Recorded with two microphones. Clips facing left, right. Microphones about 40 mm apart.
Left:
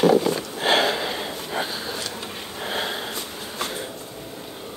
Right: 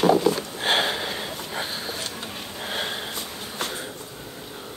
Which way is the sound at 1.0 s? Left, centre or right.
Left.